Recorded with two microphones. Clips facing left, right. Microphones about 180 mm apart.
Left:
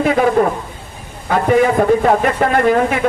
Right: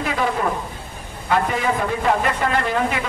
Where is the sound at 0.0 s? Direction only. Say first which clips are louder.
Left 9 dB; 55° left (ahead or behind).